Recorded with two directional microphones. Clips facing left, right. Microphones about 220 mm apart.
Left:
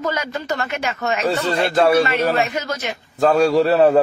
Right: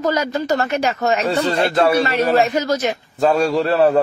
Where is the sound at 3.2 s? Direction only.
Centre (ahead or behind).